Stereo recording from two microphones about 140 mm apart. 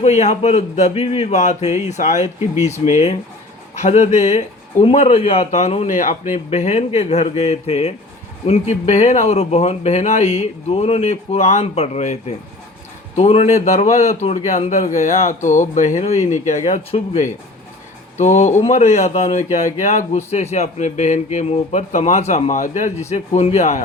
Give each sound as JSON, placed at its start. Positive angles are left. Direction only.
{"t": 0.0, "sound": "a man's voice", "side_deg": 55}